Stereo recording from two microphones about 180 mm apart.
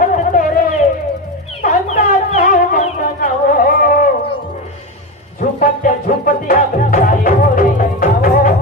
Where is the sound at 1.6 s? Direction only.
45° left (ahead or behind).